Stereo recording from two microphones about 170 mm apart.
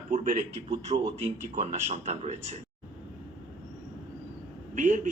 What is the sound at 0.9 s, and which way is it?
Speech, 35° right (ahead or behind).